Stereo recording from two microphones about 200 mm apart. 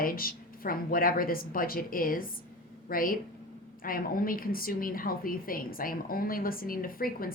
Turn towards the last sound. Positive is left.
turn(degrees=45)  # may be behind; listen again after turning